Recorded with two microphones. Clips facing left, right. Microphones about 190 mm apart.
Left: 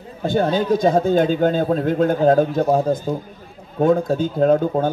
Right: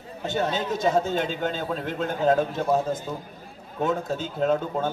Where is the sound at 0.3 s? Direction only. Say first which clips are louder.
Left 8 dB; 35° left (ahead or behind).